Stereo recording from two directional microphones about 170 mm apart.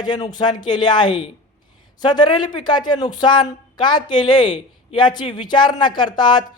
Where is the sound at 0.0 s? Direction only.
25° left (ahead or behind).